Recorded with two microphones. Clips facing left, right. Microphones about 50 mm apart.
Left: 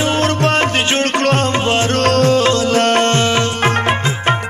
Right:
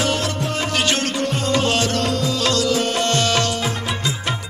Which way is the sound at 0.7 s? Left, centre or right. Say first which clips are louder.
Left 4 dB; left.